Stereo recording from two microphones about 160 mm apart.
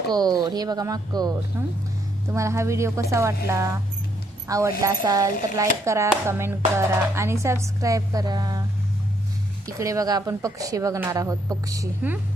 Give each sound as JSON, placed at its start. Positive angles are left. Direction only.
{"t": 0.1, "sound": "a woman's voice", "side_deg": -25}
{"t": 9.6, "sound": "speech", "side_deg": -20}